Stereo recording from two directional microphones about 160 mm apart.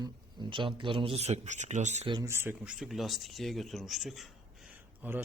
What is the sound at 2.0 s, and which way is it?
Speech, 30° right (ahead or behind).